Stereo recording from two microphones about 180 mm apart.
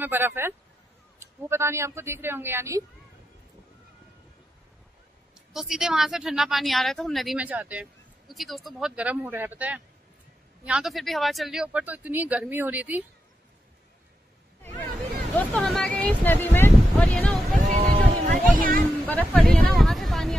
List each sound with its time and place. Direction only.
0.0 s speech: 10° right (ahead or behind)
5.5 s speech: centre (ahead or behind)
14.6 s hubbub: 10° left (ahead or behind)
15.3 s speech: 5° left (ahead or behind)
17.6 s a sound: 40° right (ahead or behind)
18.5 s speech: 50° right (ahead or behind)
19.0 s speech: 10° left (ahead or behind)